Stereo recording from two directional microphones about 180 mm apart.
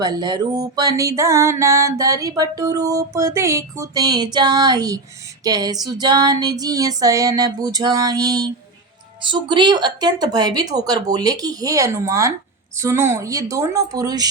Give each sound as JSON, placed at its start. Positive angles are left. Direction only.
{"t": 0.0, "sound": "music", "side_deg": -20}
{"t": 12.7, "sound": "a woman's voice", "side_deg": -15}